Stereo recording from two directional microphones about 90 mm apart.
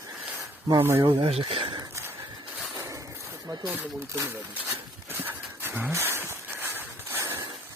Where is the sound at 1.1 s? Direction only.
90° right.